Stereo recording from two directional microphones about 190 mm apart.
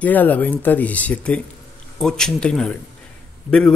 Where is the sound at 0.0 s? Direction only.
10° left (ahead or behind).